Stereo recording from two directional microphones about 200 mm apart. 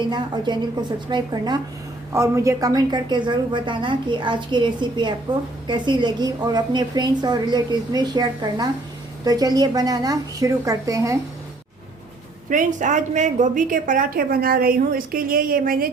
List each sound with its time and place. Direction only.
0.1 s a woman's voice: 20° right (ahead or behind)
12.5 s a woman's voice: 40° right (ahead or behind)